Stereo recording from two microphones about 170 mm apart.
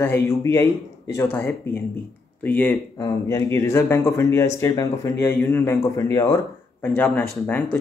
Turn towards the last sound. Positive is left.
turn(degrees=10)  # may be behind; listen again after turning